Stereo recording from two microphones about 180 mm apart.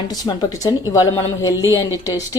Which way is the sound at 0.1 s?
20° left (ahead or behind).